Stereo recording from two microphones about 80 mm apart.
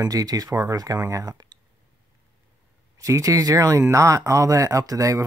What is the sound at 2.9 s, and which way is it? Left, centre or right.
Speech, right.